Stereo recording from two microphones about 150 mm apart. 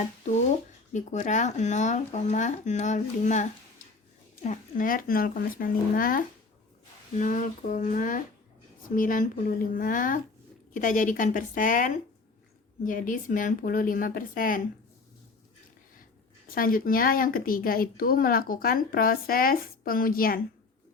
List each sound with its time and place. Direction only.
0.9 s speech: 55° left (ahead or behind)
4.4 s speech: 60° left (ahead or behind)
7.2 s speech: 60° left (ahead or behind)
16.5 s speech: 75° left (ahead or behind)